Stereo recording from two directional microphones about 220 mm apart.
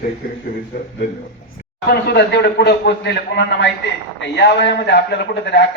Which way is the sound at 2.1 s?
45° left (ahead or behind).